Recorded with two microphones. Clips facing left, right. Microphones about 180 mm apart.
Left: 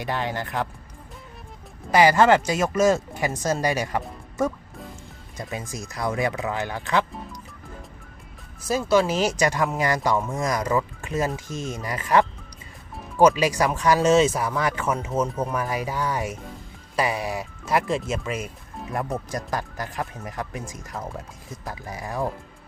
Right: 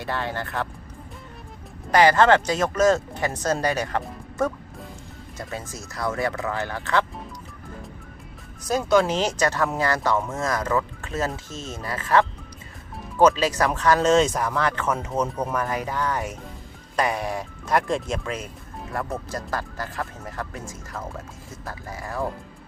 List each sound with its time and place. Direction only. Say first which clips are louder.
0.0 s speech: left 1 dB; 15° left (ahead or behind)
1.9 s speech: even; 10° left (ahead or behind)
8.6 s speech: right 1 dB; 5° left (ahead or behind)